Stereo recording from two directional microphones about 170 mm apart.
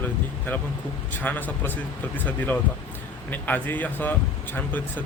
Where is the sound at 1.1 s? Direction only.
10° left (ahead or behind).